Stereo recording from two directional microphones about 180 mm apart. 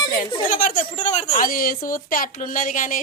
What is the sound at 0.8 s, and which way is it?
A woman's voice, 40° left (ahead or behind).